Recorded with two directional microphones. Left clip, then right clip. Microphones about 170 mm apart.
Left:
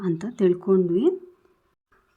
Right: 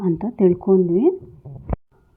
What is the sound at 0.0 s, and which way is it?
Speech, 15° right (ahead or behind).